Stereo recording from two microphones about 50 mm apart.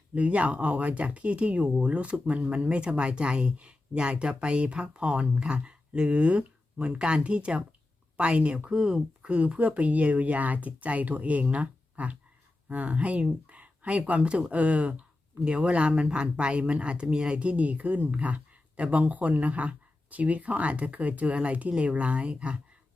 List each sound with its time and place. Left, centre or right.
0.1 s speech: right